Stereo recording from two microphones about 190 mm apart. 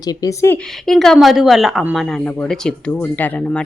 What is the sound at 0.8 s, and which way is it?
A woman's voice, centre (ahead or behind).